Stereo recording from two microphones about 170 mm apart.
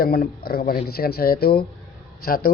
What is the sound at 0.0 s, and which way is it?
Speech, 65° left (ahead or behind).